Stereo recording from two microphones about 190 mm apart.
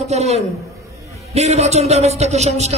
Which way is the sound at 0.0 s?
35° right (ahead or behind).